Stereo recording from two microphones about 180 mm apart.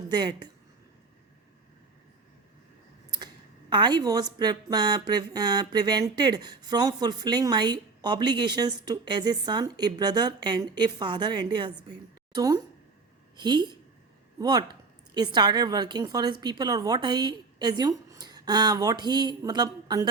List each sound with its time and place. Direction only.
0.1 s a woman's voice: 25° right (ahead or behind)
3.7 s a woman's voice: 25° right (ahead or behind)